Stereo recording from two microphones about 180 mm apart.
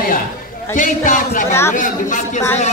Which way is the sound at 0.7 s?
45° left (ahead or behind).